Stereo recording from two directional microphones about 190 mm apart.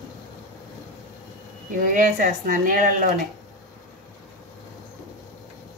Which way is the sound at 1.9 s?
45° right (ahead or behind).